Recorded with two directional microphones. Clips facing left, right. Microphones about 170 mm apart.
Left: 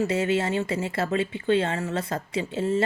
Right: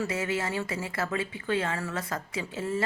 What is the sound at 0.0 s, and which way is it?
Speech, 25° left (ahead or behind).